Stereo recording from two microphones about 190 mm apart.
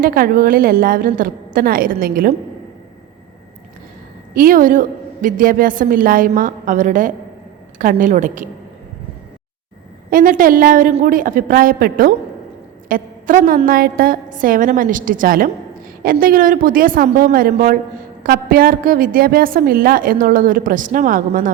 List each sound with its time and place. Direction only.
0.0 s a woman's voice: 50° right (ahead or behind)
4.4 s a woman's voice: 45° right (ahead or behind)
10.1 s a woman's voice: 45° right (ahead or behind)